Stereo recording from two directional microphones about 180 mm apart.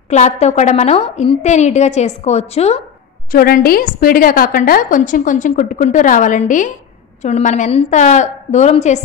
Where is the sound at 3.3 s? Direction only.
55° left (ahead or behind).